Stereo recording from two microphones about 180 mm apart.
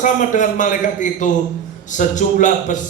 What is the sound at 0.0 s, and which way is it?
A man's voice, 45° left (ahead or behind).